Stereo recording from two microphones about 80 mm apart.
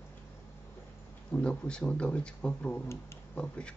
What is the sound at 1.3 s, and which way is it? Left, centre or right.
Speech, centre.